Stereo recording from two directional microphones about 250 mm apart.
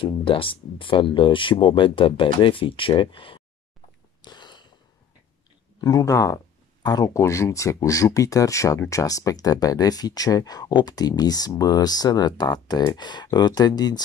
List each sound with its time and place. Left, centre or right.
0.0 s speech: left
4.2 s a sound: centre
5.8 s speech: centre